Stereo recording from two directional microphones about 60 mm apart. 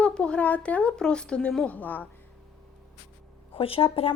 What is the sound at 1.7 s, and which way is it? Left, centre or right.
Speech, left.